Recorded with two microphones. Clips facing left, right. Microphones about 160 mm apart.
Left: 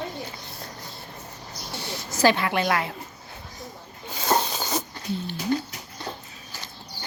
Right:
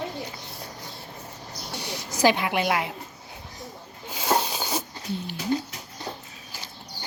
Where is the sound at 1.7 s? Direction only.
15° right (ahead or behind).